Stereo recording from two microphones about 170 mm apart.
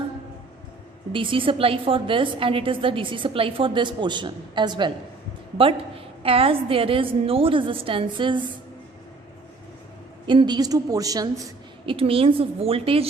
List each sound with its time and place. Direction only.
1.1 s a woman's voice: 30° right (ahead or behind)
6.2 s a woman's voice: 35° right (ahead or behind)
10.2 s a woman's voice: 25° right (ahead or behind)
11.9 s a woman's voice: 35° right (ahead or behind)